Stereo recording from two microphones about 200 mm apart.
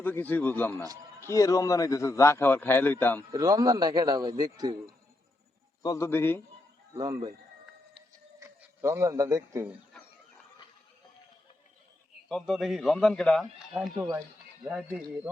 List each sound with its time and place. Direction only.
0.0 s a man's voice: 10° left (ahead or behind)
3.2 s a man's voice: 20° right (ahead or behind)
5.8 s a man's voice: 15° left (ahead or behind)
6.9 s a man's voice: 20° right (ahead or behind)
8.4 s speech: 15° right (ahead or behind)
12.3 s a man's voice: centre (ahead or behind)
14.6 s speech: 5° right (ahead or behind)